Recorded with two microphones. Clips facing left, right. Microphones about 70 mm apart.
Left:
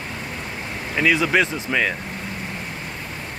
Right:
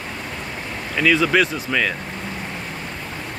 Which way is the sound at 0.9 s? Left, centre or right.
Centre.